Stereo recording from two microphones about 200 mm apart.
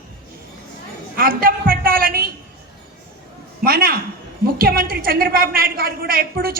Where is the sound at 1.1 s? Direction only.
45° right (ahead or behind).